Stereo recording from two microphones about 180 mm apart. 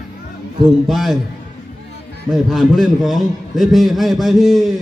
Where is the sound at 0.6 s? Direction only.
Centre (ahead or behind).